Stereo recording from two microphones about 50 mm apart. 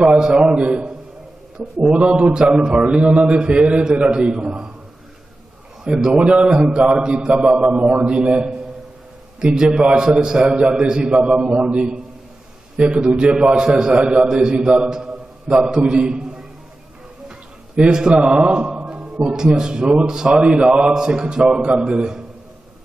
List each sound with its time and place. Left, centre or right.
0.0 s a man's voice: centre
0.6 s a man's voice: right
1.9 s a man's voice: right
5.9 s a man's voice: centre
17.7 s a man's voice: centre